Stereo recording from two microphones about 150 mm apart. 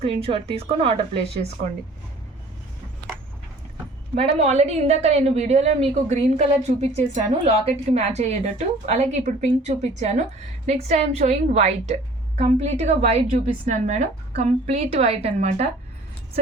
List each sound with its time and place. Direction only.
0.0 s speech: 40° right (ahead or behind)
4.2 s a woman's voice: 45° right (ahead or behind)